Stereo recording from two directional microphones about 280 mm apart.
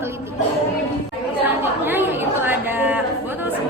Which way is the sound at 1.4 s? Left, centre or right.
Centre.